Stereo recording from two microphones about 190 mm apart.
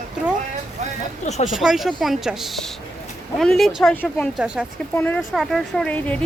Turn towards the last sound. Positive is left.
turn(degrees=5)  # may be behind; listen again after turning